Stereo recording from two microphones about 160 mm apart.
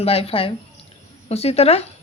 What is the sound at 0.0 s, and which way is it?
A woman's voice, 40° left (ahead or behind).